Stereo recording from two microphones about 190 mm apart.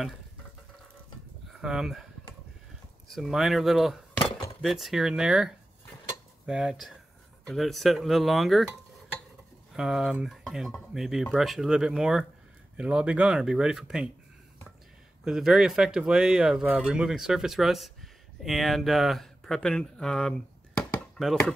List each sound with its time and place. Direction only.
1.6 s speech: 5° right (ahead or behind)
3.1 s speech: centre (ahead or behind)
9.8 s speech: 5° right (ahead or behind)
15.2 s speech: 5° right (ahead or behind)